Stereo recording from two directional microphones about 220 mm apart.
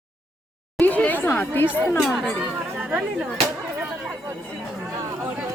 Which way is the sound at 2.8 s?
5° right (ahead or behind).